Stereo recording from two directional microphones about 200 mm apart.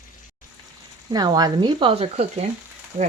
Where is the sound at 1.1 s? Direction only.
20° right (ahead or behind).